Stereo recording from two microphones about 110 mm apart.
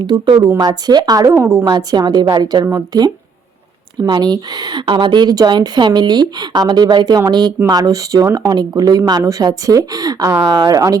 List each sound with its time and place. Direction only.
0.0 s a woman's voice: 45° right (ahead or behind); by 1.6 s 25° right (ahead or behind)
1.6 s speech: 40° right (ahead or behind)